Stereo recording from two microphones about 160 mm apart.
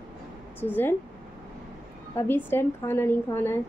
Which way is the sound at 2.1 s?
15° left (ahead or behind).